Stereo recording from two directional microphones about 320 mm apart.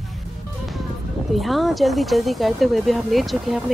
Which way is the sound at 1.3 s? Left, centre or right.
Centre.